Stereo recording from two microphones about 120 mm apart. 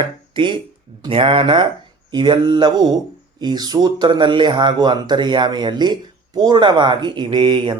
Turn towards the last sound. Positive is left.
turn(degrees=-40)  # may be behind; listen again after turning